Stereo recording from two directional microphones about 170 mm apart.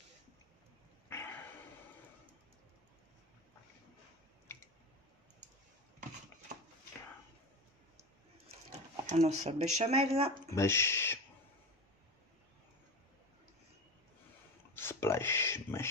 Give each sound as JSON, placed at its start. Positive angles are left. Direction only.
{"t": 1.0, "sound": "dog", "side_deg": 15}
{"t": 9.1, "sound": "speech", "side_deg": -40}
{"t": 10.5, "sound": "speech", "side_deg": 15}
{"t": 14.7, "sound": "a sound", "side_deg": 15}